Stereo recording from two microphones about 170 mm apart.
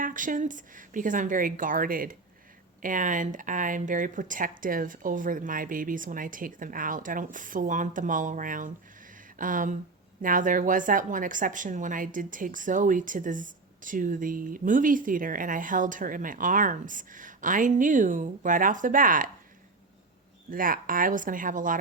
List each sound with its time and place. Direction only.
0.0 s a woman's voice: 50° right (ahead or behind)
20.5 s a woman's voice: 55° right (ahead or behind)